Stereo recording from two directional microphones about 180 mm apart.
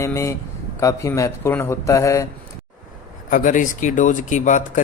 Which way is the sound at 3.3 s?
50° left (ahead or behind).